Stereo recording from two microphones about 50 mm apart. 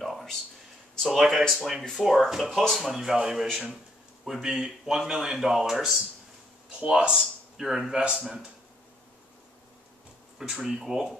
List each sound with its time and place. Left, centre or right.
0.0 s a sound: centre
1.1 s speech: centre
3.7 s a sound: centre
4.5 s speech: centre
6.7 s speech: centre
10.4 s speech: centre